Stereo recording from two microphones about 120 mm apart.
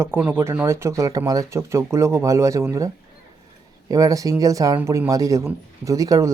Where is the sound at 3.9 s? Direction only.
30° right (ahead or behind).